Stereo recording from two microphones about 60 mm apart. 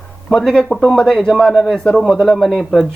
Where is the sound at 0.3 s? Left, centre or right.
Centre.